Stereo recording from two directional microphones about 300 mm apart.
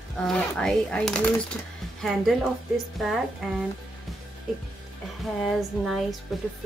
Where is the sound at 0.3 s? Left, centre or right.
Centre.